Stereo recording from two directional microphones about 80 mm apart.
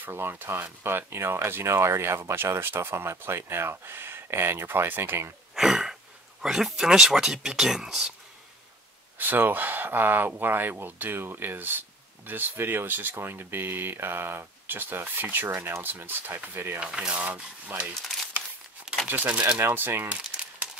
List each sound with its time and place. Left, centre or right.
0.0 s speech: right
5.5 s throat clearing: centre
6.4 s speech: centre
9.2 s speech: right
16.8 s speech: centre
19.0 s speech: centre
19.6 s speech: right